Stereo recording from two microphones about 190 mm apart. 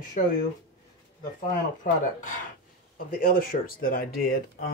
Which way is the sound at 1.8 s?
45° left (ahead or behind).